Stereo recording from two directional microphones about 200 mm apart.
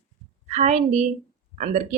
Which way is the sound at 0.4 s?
35° right (ahead or behind).